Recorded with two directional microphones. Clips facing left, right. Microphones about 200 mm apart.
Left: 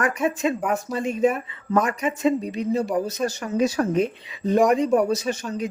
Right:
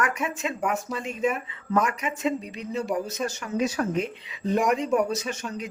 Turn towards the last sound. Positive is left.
turn(degrees=35)  # may be behind; listen again after turning